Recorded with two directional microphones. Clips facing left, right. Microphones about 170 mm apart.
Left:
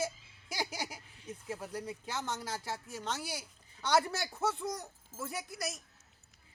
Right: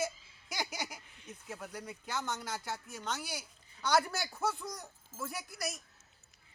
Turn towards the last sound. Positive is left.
turn(degrees=25)  # may be behind; listen again after turning